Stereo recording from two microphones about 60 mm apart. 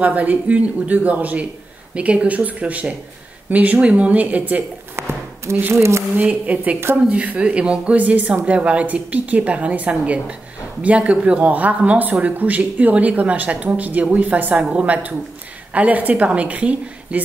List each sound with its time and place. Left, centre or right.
0.0 s speech: right
4.9 s a sound: right
5.6 s speech: right
6.2 s speech: right